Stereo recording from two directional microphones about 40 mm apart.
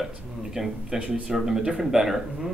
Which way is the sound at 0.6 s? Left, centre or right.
Centre.